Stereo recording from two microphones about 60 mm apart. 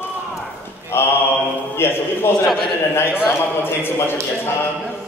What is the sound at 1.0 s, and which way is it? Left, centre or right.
A man's voice, left.